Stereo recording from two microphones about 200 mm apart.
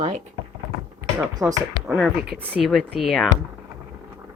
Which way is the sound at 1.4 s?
5° right (ahead or behind).